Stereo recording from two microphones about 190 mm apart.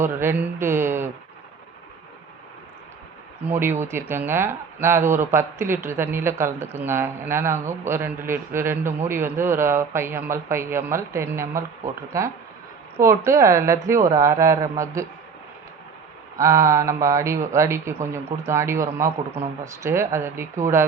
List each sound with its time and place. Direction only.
0.0 s speech: 10° right (ahead or behind)
3.4 s speech: 10° right (ahead or behind)
16.4 s speech: 15° right (ahead or behind)